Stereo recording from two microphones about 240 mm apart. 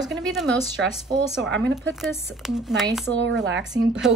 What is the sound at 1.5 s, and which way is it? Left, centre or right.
Speech, right.